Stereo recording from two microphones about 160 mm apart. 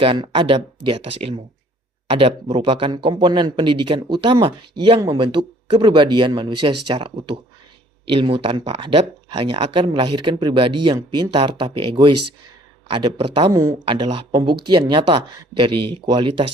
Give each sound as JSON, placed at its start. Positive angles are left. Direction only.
{"t": 0.0, "sound": "speech", "side_deg": -30}
{"t": 13.5, "sound": "speech", "side_deg": -20}
{"t": 13.8, "sound": "speech", "side_deg": -30}